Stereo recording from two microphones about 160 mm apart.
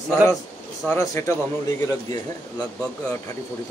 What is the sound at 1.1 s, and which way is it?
Speech, 20° left (ahead or behind).